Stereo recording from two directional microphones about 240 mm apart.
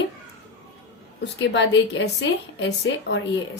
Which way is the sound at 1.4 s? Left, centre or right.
Left.